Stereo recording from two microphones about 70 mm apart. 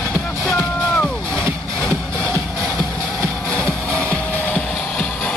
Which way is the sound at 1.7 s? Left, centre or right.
Centre.